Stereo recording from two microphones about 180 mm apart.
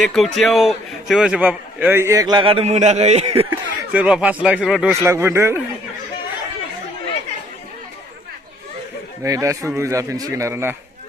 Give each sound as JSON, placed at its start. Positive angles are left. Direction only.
{"t": 0.0, "sound": "a man's voice", "side_deg": 0}
{"t": 3.5, "sound": "a man's voice", "side_deg": -5}
{"t": 4.9, "sound": "a man's voice", "side_deg": -15}
{"t": 9.2, "sound": "a man's voice", "side_deg": -20}